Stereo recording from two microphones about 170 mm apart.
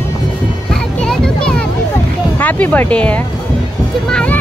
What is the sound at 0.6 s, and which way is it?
Music, 5° left (ahead or behind).